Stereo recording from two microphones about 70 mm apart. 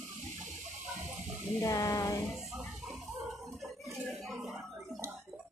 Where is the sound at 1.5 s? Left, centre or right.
Left.